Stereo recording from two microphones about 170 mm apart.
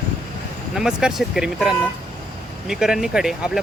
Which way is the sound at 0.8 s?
5° right (ahead or behind).